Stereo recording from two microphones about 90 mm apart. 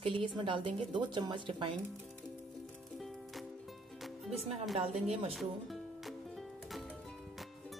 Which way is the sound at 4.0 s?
Centre (ahead or behind).